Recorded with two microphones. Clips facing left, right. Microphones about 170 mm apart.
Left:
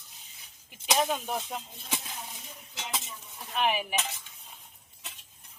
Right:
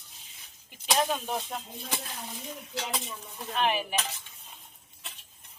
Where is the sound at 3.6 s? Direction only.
10° left (ahead or behind).